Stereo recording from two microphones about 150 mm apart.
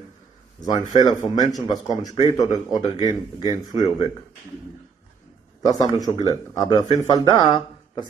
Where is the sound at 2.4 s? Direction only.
25° left (ahead or behind).